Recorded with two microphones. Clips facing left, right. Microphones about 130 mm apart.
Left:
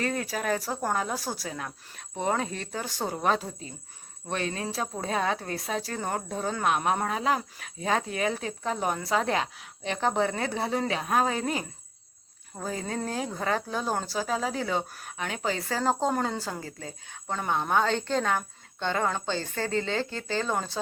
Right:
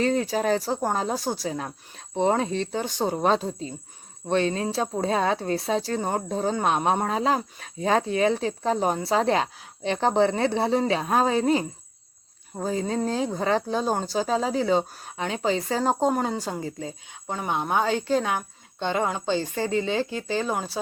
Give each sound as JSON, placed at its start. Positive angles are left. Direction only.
{"t": 0.0, "sound": "a woman's voice", "side_deg": -25}